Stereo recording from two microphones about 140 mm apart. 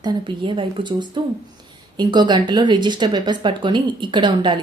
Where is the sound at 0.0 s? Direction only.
35° right (ahead or behind).